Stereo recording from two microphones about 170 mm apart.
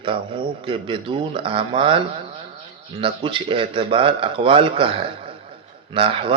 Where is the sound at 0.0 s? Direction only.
30° right (ahead or behind).